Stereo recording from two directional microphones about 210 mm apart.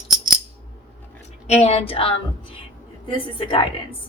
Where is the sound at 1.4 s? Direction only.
30° left (ahead or behind).